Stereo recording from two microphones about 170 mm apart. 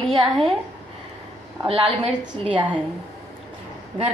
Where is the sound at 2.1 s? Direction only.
5° right (ahead or behind).